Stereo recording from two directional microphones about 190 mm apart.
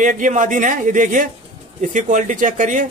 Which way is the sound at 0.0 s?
45° right (ahead or behind).